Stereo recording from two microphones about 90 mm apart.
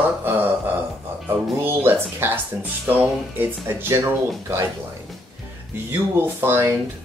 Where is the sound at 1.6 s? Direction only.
25° right (ahead or behind).